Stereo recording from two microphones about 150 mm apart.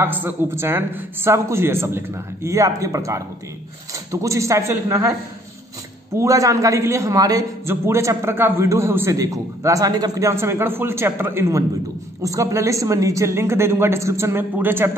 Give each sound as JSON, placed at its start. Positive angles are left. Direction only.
{"t": 0.0, "sound": "a man's voice", "side_deg": -15}
{"t": 6.1, "sound": "a man's voice", "side_deg": -20}